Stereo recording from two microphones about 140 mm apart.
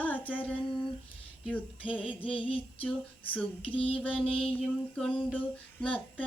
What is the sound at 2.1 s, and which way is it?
Female singing, 10° left (ahead or behind).